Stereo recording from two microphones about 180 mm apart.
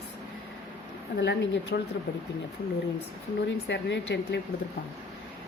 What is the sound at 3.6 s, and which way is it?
Speech, 75° left (ahead or behind).